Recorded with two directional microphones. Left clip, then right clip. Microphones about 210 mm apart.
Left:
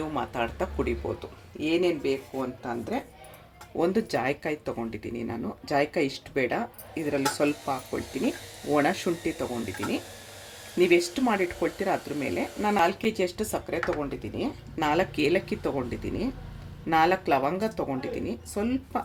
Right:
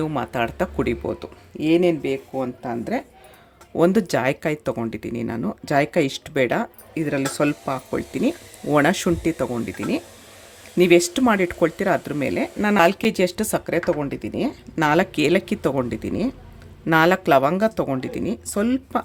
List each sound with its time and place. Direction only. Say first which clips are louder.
0.1 s speech: right 6 dB; 55° right (ahead or behind)
3.8 s speech: right 7 dB; 55° right (ahead or behind)
10.8 s speech: right 6 dB; 55° right (ahead or behind)